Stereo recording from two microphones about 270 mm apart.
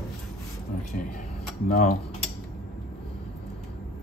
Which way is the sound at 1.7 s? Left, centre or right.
Left.